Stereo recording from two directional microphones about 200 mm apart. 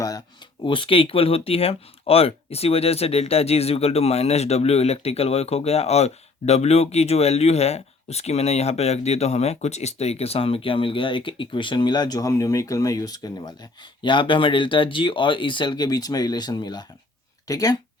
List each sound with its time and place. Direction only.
0.6 s speech: 25° left (ahead or behind)